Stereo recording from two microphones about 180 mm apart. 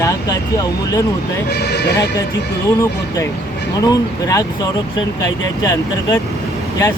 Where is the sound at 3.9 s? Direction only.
20° left (ahead or behind).